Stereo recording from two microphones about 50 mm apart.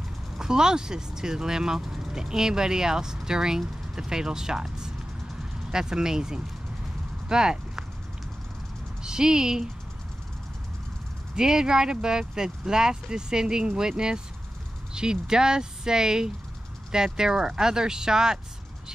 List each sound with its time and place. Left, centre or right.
0.4 s speech: centre
9.0 s speech: centre
11.3 s speech: centre